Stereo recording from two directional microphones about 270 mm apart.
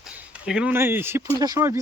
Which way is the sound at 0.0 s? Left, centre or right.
Centre.